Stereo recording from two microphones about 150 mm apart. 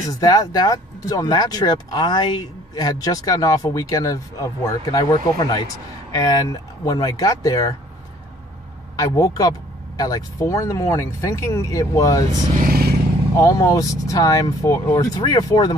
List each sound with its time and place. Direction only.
0.2 s speech: 25° left (ahead or behind)
8.9 s speech: 25° left (ahead or behind)
12.5 s vehicle: 80° right
13.4 s speech: 20° left (ahead or behind)